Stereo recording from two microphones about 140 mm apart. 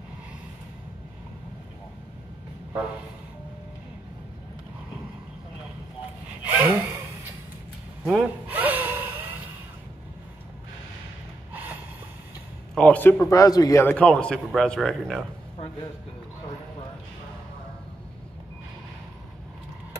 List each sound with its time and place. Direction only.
6.5 s gasp: 15° right (ahead or behind)
8.0 s gasp: 5° right (ahead or behind)
11.5 s snort: 10° right (ahead or behind)
12.7 s a man's voice: 10° left (ahead or behind)
13.3 s speech: 25° left (ahead or behind)
13.8 s speech: 5° left (ahead or behind)